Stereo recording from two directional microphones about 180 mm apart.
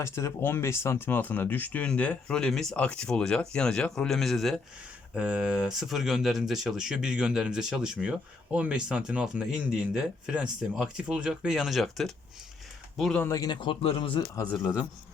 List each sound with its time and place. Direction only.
0.0 s speech: 15° left (ahead or behind)
13.2 s a man's voice: 20° left (ahead or behind)